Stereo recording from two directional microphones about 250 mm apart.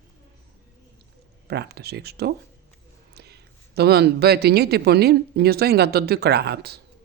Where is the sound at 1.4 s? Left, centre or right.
Right.